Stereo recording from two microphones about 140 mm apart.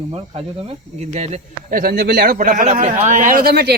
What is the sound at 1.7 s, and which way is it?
A man's voice, 90° right.